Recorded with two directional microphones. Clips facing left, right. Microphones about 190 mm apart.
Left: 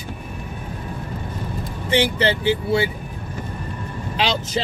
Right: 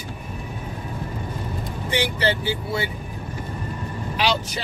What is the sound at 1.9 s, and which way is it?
Speech, 25° left (ahead or behind).